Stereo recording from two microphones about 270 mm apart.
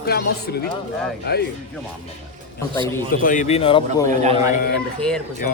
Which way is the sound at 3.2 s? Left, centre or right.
Left.